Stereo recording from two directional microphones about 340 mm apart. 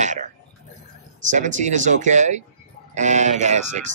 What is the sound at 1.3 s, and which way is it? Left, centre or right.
Speech, right.